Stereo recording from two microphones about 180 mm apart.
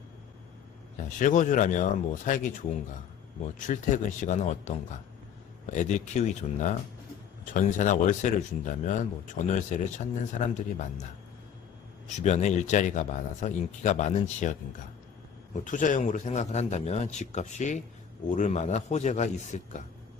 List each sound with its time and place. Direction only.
0.9 s speech: 45° left (ahead or behind)
3.7 s speech: 45° left (ahead or behind)
12.0 s a man's voice: 40° left (ahead or behind)
15.6 s a man's voice: 45° left (ahead or behind)